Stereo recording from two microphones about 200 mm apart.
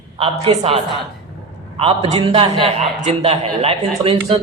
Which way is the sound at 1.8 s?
30° right (ahead or behind).